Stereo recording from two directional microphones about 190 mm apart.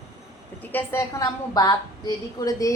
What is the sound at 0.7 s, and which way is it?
A woman's voice, 15° left (ahead or behind).